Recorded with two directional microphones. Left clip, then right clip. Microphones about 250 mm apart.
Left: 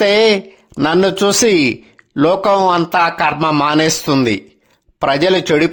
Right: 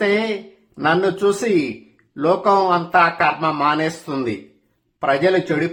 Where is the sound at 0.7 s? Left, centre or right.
Left.